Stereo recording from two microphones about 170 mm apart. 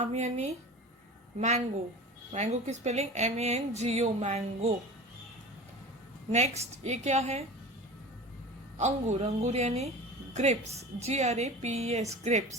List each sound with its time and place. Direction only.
0.0 s speech: 40° right (ahead or behind)
6.3 s speech: 40° right (ahead or behind)
8.8 s a woman's voice: 45° right (ahead or behind)